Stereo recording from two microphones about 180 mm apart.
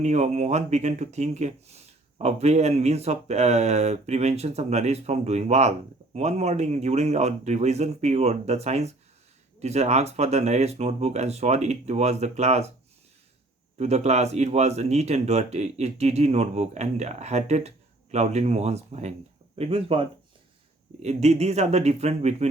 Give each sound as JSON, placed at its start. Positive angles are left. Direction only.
{"t": 0.0, "sound": "speech", "side_deg": -40}
{"t": 13.7, "sound": "speech", "side_deg": -35}